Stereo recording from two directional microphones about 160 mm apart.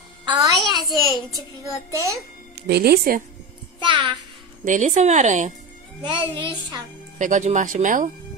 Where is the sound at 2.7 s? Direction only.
80° right.